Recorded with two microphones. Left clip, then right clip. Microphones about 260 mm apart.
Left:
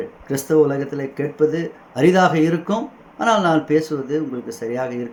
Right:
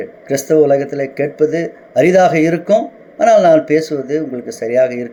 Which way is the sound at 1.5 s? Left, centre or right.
Left.